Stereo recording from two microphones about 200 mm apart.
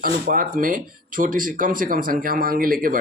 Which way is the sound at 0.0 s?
45° right (ahead or behind).